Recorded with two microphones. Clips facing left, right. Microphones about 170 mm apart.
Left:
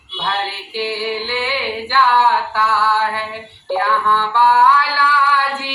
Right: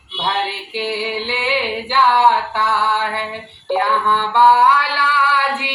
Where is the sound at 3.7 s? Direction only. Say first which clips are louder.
Even; 20° right (ahead or behind).